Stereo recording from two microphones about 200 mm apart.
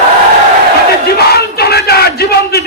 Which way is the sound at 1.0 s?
50° left (ahead or behind).